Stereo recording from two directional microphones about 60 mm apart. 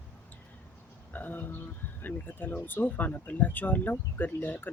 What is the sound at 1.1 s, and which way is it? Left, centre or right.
Speech, left.